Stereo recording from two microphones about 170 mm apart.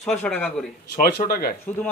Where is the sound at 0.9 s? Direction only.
55° left (ahead or behind).